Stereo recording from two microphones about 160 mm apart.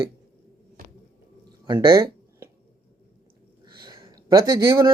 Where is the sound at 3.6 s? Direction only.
30° right (ahead or behind).